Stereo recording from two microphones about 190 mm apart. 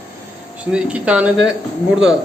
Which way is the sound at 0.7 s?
5° right (ahead or behind).